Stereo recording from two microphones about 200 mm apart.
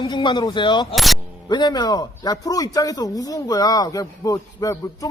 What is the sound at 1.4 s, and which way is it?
A man's voice, 20° left (ahead or behind).